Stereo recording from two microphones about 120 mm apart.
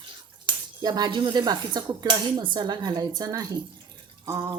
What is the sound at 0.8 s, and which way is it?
Speech, 35° right (ahead or behind).